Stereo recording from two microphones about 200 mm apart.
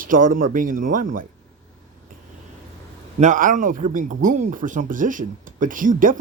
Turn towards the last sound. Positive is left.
turn(degrees=-40)  # may be behind; listen again after turning